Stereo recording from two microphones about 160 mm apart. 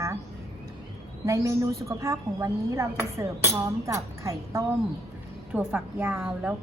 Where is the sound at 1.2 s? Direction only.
20° right (ahead or behind).